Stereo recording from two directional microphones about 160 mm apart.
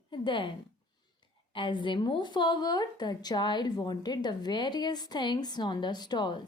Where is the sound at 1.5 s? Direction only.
30° left (ahead or behind).